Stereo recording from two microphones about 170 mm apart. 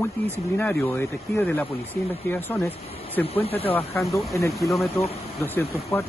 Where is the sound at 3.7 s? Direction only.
Centre (ahead or behind).